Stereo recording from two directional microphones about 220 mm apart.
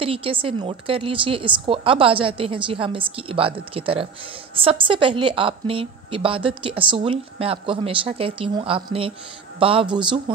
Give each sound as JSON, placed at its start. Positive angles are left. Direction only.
{"t": 0.0, "sound": "a woman's voice", "side_deg": -25}